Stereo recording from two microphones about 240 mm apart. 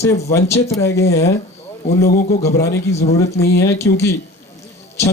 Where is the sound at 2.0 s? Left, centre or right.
Left.